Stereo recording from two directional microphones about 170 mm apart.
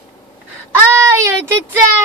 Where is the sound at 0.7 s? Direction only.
15° right (ahead or behind).